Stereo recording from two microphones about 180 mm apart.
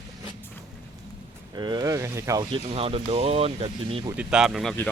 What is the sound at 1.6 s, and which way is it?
Speech, 25° right (ahead or behind).